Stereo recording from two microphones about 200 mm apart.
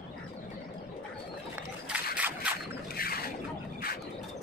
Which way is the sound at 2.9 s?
50° left (ahead or behind).